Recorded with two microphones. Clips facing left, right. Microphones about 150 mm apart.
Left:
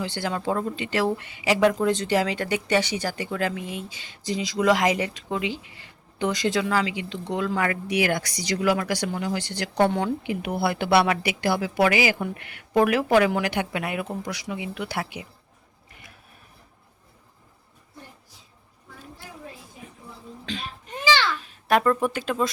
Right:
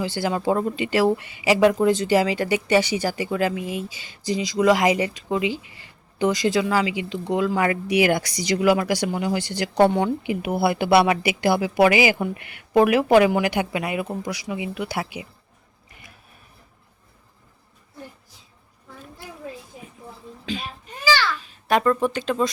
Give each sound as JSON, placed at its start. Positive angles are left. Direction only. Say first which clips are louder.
{"t": 0.0, "sound": "speech", "louder": "right 4 dB", "side_deg": -5}
{"t": 20.4, "sound": "baby cry", "louder": "right 4 dB", "side_deg": -5}
{"t": 21.0, "sound": "a sound", "louder": "right 1 dB", "side_deg": 20}
{"t": 21.3, "sound": "speech", "louder": "even", "side_deg": 0}